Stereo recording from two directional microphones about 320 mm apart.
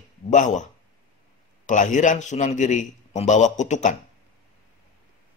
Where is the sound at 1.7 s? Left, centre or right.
Left.